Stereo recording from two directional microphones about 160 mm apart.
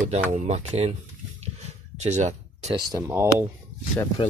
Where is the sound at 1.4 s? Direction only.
45° right (ahead or behind).